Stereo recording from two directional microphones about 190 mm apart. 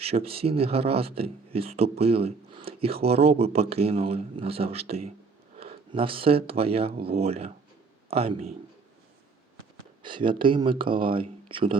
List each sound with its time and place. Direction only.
0.0 s speech: 30° right (ahead or behind)
10.0 s speech: 25° right (ahead or behind)